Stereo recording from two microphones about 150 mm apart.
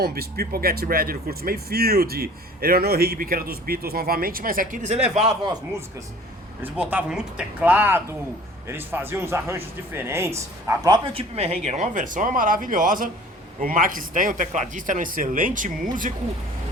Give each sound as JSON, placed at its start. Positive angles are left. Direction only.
{"t": 0.0, "sound": "speech", "side_deg": -90}
{"t": 6.6, "sound": "a man's voice", "side_deg": -10}